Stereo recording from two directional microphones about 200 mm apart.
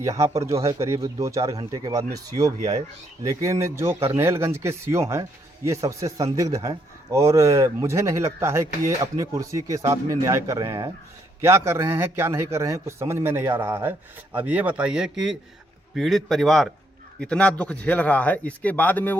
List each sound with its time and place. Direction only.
0.0 s a man's voice: 15° right (ahead or behind); by 19.1 s 10° left (ahead or behind)